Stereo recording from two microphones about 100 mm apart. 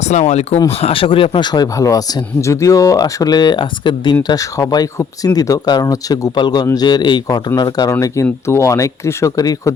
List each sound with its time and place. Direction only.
0.7 s speech: 80° left; by 6.3 s 35° left (ahead or behind)
6.3 s speech: 45° left (ahead or behind)
7.9 s speech: 30° left (ahead or behind)